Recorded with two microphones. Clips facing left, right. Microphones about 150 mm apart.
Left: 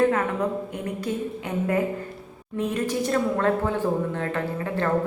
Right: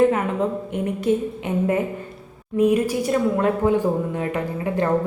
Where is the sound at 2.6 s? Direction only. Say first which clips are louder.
Right 7 dB; 10° right (ahead or behind).